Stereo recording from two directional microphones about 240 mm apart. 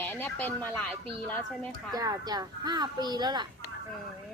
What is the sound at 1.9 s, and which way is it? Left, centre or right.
Speech, centre.